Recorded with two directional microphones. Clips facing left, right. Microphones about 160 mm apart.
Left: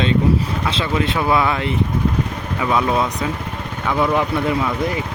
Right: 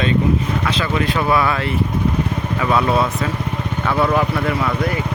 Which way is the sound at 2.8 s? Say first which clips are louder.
Right 1 dB; 5° right (ahead or behind).